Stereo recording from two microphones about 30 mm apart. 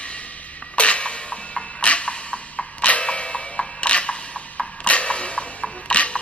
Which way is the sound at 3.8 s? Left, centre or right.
Left.